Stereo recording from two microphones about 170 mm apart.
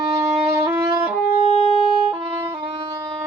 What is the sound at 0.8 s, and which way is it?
Music, 25° right (ahead or behind).